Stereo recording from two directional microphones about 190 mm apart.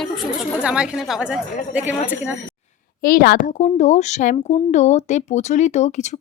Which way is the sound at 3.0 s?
50° left (ahead or behind).